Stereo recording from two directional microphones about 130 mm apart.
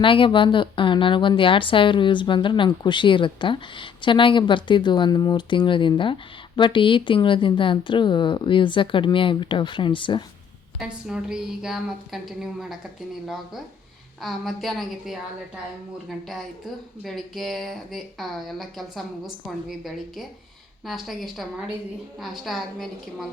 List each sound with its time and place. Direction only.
0.0 s a woman's voice: 40° left (ahead or behind)
10.8 s speech: 5° right (ahead or behind)